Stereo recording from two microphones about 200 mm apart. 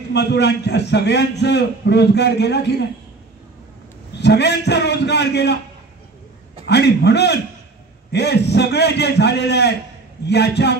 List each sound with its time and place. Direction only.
0.1 s a man's voice: 55° left (ahead or behind)
4.2 s a man's voice: 55° left (ahead or behind)
6.6 s a man's voice: 55° left (ahead or behind)